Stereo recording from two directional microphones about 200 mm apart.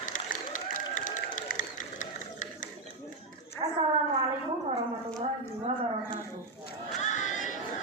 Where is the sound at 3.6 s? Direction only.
25° right (ahead or behind).